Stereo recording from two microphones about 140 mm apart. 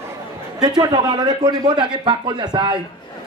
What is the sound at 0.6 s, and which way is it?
A man's voice, 30° right (ahead or behind).